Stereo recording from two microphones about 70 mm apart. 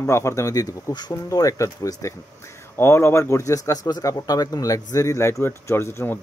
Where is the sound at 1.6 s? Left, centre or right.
Left.